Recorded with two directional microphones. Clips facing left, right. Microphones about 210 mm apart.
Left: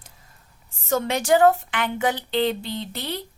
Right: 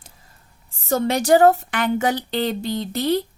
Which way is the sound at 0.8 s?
35° right (ahead or behind).